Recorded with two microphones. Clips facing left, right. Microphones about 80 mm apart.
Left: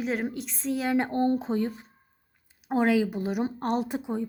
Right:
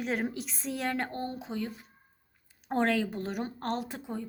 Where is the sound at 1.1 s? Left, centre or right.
Left.